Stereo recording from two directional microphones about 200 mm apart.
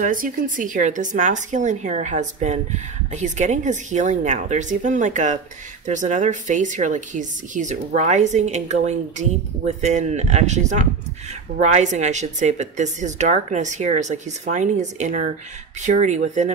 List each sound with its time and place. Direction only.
0.0 s a woman's voice: 40° right (ahead or behind)